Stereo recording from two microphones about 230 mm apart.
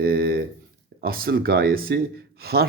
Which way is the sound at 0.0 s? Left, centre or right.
Right.